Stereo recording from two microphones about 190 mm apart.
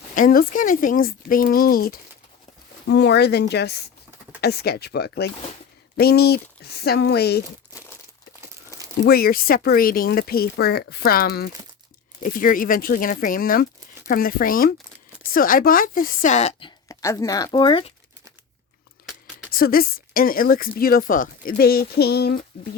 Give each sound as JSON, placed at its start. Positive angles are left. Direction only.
{"t": 0.1, "sound": "speech", "side_deg": 45}
{"t": 2.8, "sound": "speech", "side_deg": 65}
{"t": 9.0, "sound": "a woman's voice", "side_deg": 55}
{"t": 19.5, "sound": "speech", "side_deg": 50}